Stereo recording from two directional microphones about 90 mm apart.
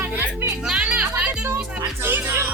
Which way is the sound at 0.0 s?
20° right (ahead or behind).